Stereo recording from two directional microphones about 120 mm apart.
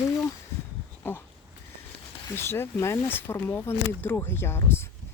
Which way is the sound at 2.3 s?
20° left (ahead or behind).